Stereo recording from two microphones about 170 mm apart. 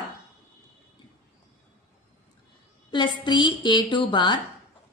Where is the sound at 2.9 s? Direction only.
25° left (ahead or behind).